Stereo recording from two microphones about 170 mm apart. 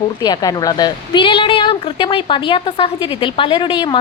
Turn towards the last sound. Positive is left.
turn(degrees=30)  # may be behind; listen again after turning